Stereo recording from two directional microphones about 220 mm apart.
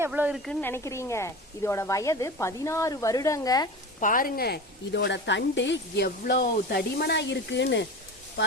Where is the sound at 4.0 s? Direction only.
35° left (ahead or behind).